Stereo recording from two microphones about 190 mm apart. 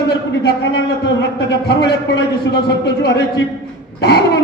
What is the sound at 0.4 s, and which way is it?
A man's voice, 60° left (ahead or behind).